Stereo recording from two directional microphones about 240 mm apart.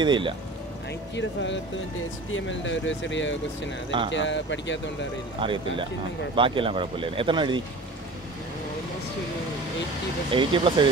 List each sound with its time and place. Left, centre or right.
0.0 s speech: centre
1.1 s speech: left
5.4 s speech: right
10.3 s speech: right